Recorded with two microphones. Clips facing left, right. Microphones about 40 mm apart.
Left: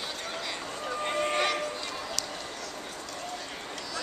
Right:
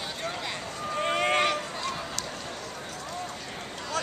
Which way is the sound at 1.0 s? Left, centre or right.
Right.